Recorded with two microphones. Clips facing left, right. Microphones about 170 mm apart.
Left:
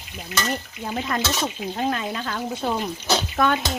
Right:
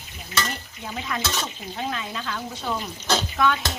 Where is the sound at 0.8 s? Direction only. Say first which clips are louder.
Left 4 dB; 45° left (ahead or behind).